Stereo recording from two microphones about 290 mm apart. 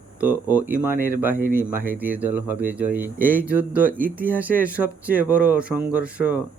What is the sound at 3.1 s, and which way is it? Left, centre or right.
Speech, right.